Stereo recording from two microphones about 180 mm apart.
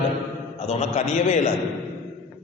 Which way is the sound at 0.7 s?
35° left (ahead or behind).